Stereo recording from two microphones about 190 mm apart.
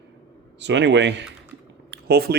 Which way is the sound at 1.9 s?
55° right (ahead or behind).